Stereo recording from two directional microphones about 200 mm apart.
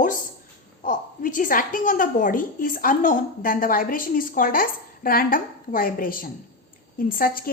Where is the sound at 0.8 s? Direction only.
40° left (ahead or behind).